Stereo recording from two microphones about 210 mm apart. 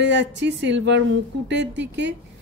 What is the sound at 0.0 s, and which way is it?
Speech, 60° right (ahead or behind).